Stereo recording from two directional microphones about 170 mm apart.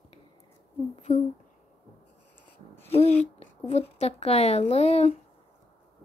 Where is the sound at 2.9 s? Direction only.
35° left (ahead or behind).